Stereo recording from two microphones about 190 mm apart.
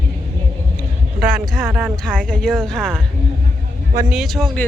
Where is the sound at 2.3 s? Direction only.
5° left (ahead or behind).